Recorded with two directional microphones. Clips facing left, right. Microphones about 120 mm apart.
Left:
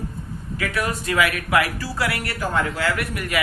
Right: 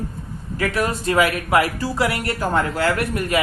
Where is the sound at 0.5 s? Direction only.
30° right (ahead or behind).